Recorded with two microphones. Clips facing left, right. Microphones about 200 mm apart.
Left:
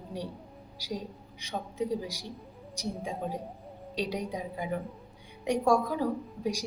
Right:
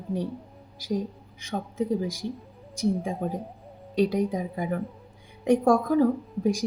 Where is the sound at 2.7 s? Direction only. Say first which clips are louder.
Right 9 dB; 50° right (ahead or behind).